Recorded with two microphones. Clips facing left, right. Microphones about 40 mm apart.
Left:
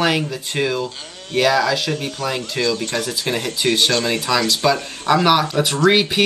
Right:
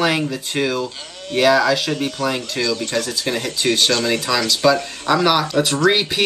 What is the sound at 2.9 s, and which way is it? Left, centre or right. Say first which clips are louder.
Speech: even; left.